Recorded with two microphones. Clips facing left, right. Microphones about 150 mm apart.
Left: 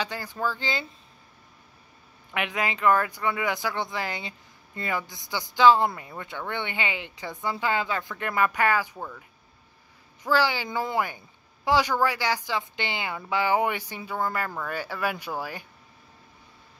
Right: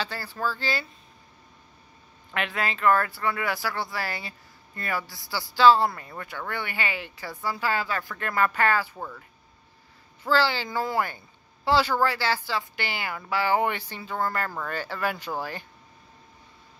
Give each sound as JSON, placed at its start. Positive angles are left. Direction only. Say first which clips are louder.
{"t": 0.0, "sound": "speech", "louder": "left 1 dB", "side_deg": 15}
{"t": 2.3, "sound": "speech", "louder": "left 1 dB", "side_deg": 15}
{"t": 8.9, "sound": "speech", "louder": "even", "side_deg": 0}
{"t": 10.2, "sound": "speech", "louder": "even", "side_deg": 15}